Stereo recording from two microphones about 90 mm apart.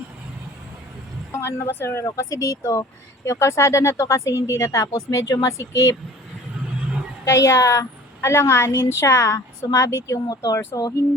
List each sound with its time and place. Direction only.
1.3 s a woman's voice: 30° left (ahead or behind)
7.3 s a woman's voice: 35° left (ahead or behind)
10.2 s speech: 45° left (ahead or behind)